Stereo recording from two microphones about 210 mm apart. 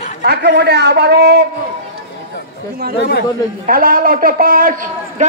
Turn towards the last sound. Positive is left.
turn(degrees=-40)  # may be behind; listen again after turning